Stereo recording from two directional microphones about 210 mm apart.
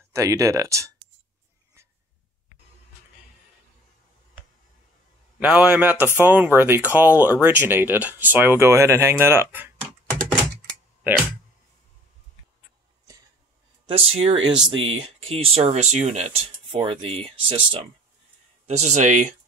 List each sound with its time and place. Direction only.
0.1 s speech: 15° right (ahead or behind)
5.4 s speech: 5° right (ahead or behind)
13.8 s speech: 25° right (ahead or behind)